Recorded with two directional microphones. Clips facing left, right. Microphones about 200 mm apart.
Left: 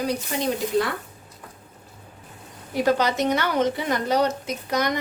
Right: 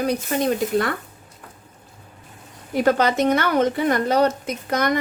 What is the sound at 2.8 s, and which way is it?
A woman's voice, 55° right (ahead or behind).